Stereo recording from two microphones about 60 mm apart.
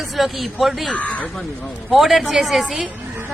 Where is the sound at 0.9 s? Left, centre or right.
Left.